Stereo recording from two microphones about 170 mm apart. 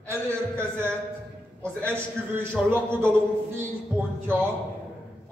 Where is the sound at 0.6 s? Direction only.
15° right (ahead or behind).